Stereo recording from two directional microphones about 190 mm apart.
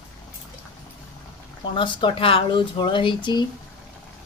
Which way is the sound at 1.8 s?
25° left (ahead or behind).